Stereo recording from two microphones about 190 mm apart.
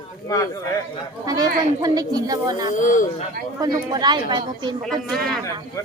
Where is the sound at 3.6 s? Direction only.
20° right (ahead or behind).